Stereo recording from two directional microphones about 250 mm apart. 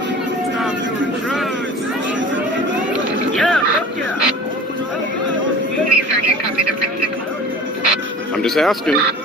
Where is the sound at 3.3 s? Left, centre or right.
Centre.